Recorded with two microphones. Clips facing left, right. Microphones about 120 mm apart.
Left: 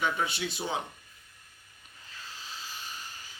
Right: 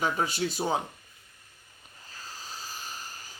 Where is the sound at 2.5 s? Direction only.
40° right (ahead or behind).